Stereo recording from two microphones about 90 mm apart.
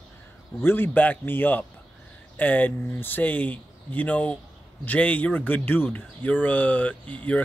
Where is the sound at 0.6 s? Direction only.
25° left (ahead or behind).